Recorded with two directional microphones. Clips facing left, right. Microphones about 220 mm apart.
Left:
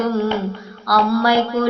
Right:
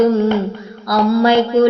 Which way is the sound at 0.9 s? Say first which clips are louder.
Right 4 dB; 20° right (ahead or behind).